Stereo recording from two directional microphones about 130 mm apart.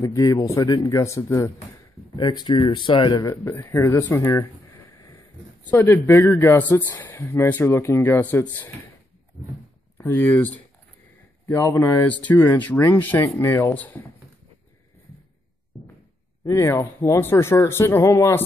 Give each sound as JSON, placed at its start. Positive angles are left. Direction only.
{"t": 0.0, "sound": "speech", "side_deg": 25}
{"t": 2.1, "sound": "speech", "side_deg": 35}
{"t": 3.5, "sound": "speech", "side_deg": 25}
{"t": 5.8, "sound": "speech", "side_deg": 20}
{"t": 9.9, "sound": "speech", "side_deg": 15}
{"t": 15.1, "sound": "a sound", "side_deg": 0}
{"t": 16.4, "sound": "speech", "side_deg": 25}